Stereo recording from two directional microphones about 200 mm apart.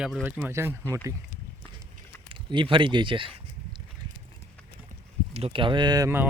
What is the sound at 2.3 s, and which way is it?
Speech, 25° right (ahead or behind).